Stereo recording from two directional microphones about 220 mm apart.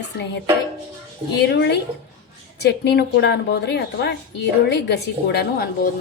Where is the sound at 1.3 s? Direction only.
50° left (ahead or behind).